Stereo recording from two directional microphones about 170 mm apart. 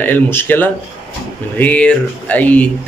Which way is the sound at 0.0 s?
15° left (ahead or behind).